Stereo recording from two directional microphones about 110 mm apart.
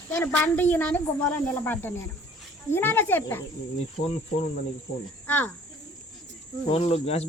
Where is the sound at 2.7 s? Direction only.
20° left (ahead or behind).